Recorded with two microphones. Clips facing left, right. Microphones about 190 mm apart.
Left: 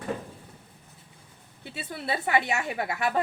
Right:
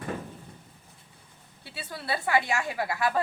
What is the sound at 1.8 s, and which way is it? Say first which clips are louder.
A woman's voice: left 1 dB; 20° left (ahead or behind).